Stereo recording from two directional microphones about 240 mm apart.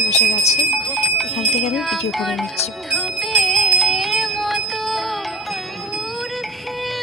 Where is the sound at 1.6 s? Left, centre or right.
Centre.